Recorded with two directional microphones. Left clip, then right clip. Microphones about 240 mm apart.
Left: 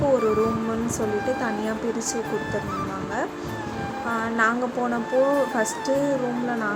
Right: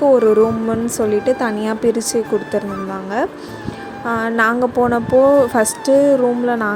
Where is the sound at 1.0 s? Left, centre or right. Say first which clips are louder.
Right 10 dB; right.